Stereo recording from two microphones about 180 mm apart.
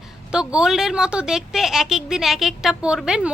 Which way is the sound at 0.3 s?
5° right (ahead or behind).